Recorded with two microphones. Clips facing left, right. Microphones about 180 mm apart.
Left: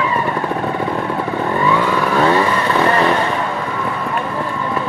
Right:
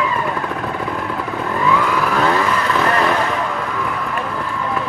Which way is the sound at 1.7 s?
30° left (ahead or behind).